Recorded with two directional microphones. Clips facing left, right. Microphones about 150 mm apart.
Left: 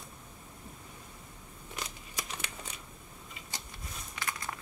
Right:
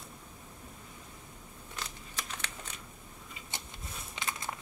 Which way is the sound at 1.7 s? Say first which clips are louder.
Left 1 dB; 10° left (ahead or behind).